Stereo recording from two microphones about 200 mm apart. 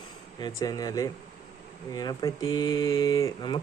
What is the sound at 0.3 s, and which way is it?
Speech, 20° left (ahead or behind).